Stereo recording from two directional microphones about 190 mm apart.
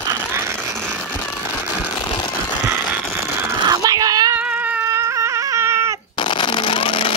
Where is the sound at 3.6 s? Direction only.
20° right (ahead or behind).